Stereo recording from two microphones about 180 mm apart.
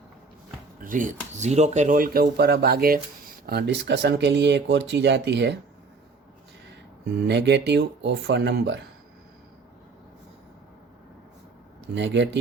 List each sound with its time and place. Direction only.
0.8 s speech: 50° right (ahead or behind); by 5.5 s 75° right (ahead or behind)
7.3 s speech: 70° right (ahead or behind)
11.9 s speech: 80° right